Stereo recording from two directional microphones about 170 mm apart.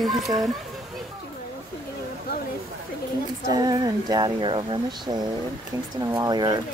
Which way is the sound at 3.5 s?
25° right (ahead or behind).